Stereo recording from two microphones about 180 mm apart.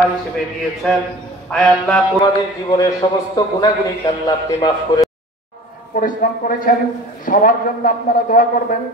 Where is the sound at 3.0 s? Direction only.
25° left (ahead or behind).